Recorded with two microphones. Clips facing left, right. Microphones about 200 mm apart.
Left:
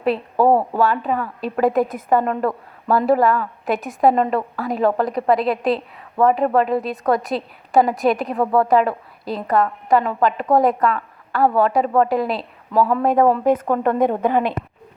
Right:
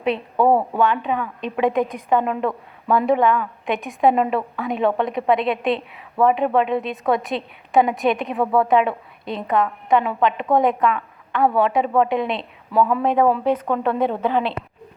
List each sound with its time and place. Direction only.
0.0 s a woman's voice: 5° left (ahead or behind)